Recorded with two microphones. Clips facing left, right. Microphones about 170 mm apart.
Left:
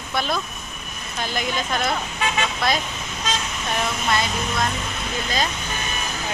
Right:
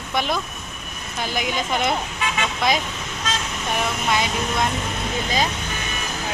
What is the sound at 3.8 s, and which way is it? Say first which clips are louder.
Speech: right 1 dB; 15° right (ahead or behind).